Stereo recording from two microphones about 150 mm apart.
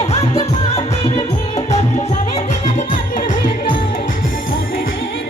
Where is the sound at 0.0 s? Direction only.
45° left (ahead or behind); by 3.3 s 60° left (ahead or behind).